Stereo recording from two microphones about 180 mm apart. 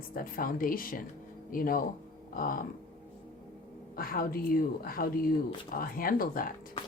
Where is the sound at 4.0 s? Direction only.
55° left (ahead or behind).